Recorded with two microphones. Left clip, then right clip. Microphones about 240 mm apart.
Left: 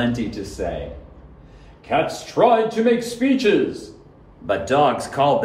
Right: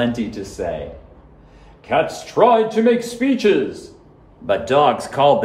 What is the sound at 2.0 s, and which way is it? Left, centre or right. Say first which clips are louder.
Speech: right 2 dB; right.